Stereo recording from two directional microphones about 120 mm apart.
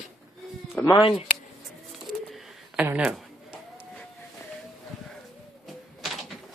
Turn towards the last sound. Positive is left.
turn(degrees=0)  # may be behind; listen again after turning